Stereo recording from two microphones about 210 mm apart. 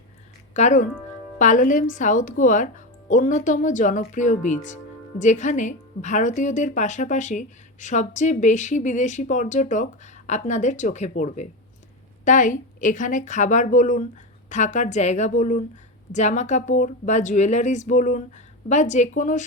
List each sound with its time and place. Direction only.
0.5 s a woman's voice: 35° left (ahead or behind)